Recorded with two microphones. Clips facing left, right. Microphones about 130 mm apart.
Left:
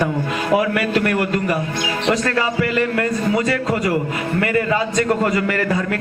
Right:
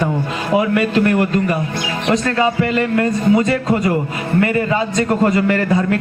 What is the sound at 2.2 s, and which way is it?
A man's voice, 25° right (ahead or behind).